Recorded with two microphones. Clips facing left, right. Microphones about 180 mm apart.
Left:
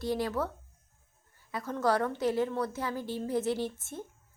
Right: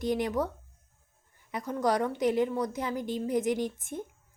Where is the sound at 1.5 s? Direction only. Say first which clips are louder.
Right 1 dB; 15° right (ahead or behind).